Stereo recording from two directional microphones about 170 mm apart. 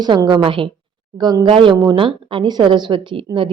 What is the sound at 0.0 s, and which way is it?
A woman's voice, 25° right (ahead or behind).